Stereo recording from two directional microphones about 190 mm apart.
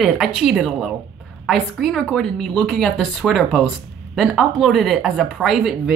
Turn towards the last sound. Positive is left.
turn(degrees=-5)  # may be behind; listen again after turning